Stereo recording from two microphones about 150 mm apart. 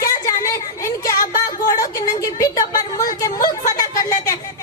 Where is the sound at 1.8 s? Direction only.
25° left (ahead or behind).